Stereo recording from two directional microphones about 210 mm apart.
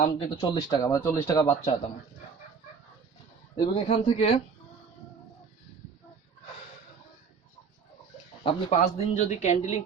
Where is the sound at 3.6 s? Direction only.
30° left (ahead or behind).